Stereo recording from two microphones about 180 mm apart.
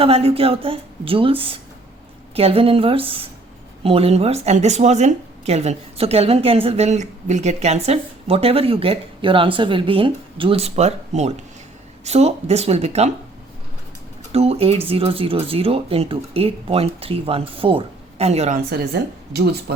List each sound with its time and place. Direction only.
0.0 s speech: 30° right (ahead or behind)
14.3 s speech: 35° right (ahead or behind)
19.3 s speech: 65° right (ahead or behind)